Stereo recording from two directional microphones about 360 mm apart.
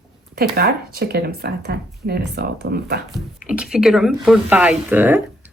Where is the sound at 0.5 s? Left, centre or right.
Right.